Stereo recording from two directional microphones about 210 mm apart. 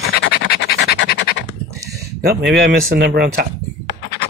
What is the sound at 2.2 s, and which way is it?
Speech, 50° right (ahead or behind).